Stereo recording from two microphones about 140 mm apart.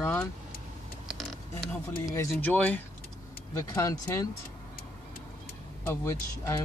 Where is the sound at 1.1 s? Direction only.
Centre (ahead or behind).